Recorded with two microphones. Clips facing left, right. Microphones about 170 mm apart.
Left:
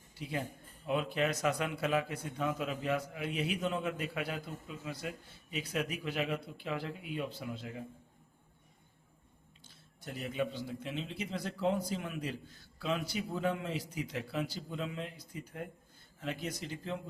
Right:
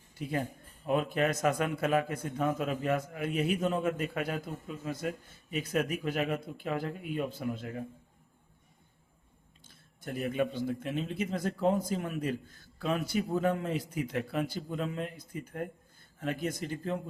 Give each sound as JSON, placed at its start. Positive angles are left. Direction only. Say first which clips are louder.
{"t": 0.2, "sound": "a man's voice", "louder": "right 5 dB", "side_deg": -50}
{"t": 9.6, "sound": "a man's voice", "louder": "right 6 dB", "side_deg": -50}